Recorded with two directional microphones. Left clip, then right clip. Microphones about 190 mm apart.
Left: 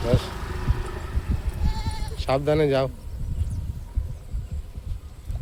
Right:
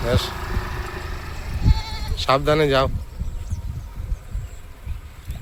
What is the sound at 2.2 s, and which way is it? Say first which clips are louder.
Speech: right 4 dB; centre (ahead or behind).